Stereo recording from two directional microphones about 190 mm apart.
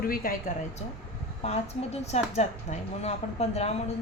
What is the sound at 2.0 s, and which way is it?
A woman's voice, 35° left (ahead or behind).